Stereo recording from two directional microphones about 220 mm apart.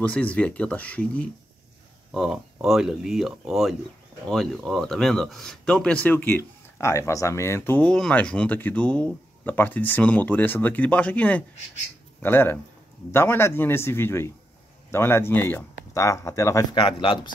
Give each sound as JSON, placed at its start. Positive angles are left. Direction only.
{"t": 0.0, "sound": "speech", "side_deg": 5}
{"t": 16.7, "sound": "speech", "side_deg": 25}